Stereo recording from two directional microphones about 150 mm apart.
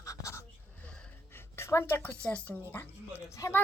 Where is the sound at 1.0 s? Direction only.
10° left (ahead or behind).